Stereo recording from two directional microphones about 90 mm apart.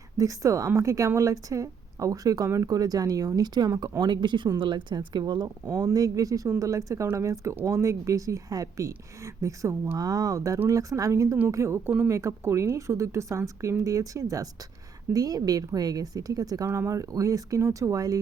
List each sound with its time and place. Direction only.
0.2 s a woman's voice: 35° right (ahead or behind); by 5.5 s 55° right (ahead or behind)
5.6 s a woman's voice: 35° right (ahead or behind)
16.6 s a woman's voice: 30° right (ahead or behind)